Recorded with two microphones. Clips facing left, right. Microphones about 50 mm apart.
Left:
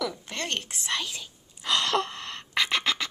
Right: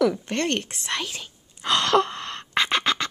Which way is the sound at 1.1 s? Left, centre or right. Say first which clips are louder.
Right 3 dB; right.